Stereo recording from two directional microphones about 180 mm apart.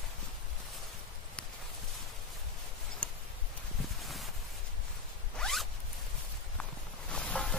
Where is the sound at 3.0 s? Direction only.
5° left (ahead or behind).